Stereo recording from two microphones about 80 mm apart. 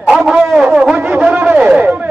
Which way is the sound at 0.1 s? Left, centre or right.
Centre.